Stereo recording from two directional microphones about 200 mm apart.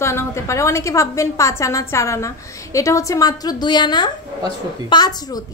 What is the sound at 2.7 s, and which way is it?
A woman's voice, 15° left (ahead or behind).